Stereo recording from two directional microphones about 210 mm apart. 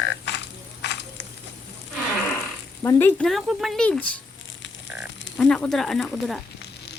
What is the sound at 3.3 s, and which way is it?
Speech, centre (ahead or behind).